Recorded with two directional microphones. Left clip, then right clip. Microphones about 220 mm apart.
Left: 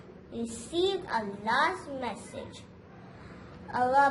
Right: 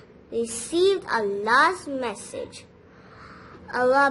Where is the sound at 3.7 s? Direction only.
50° right (ahead or behind).